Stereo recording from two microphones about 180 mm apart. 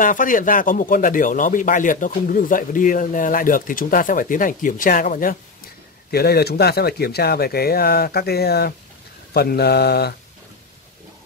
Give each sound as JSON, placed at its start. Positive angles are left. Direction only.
{"t": 0.0, "sound": "speech", "side_deg": 45}
{"t": 6.1, "sound": "speech", "side_deg": 60}